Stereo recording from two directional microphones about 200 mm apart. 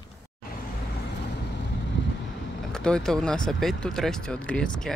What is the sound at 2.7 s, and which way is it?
Speech, 5° left (ahead or behind).